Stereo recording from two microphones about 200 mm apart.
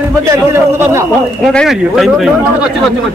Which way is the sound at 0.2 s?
15° right (ahead or behind).